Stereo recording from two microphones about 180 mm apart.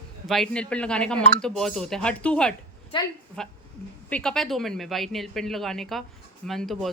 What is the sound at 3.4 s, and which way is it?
Speech, 5° left (ahead or behind).